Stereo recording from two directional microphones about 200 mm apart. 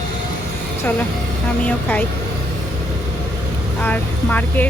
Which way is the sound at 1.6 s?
5° left (ahead or behind).